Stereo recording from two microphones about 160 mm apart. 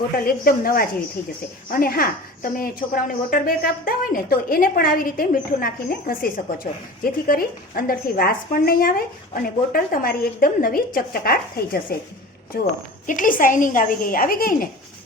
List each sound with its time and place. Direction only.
0.3 s a woman's voice: 65° left (ahead or behind)
13.1 s a woman's voice: 55° left (ahead or behind)